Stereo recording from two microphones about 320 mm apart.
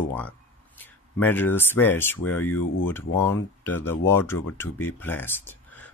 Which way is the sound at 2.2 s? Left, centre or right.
Left.